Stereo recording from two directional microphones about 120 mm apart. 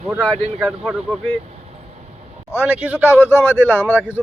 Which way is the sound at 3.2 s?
20° left (ahead or behind).